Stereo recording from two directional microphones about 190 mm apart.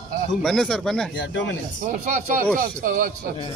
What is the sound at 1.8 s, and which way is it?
Speech, 45° right (ahead or behind).